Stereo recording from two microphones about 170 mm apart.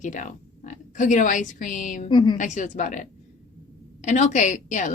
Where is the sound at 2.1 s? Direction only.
25° left (ahead or behind).